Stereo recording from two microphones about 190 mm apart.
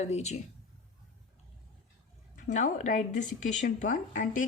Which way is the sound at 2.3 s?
40° left (ahead or behind).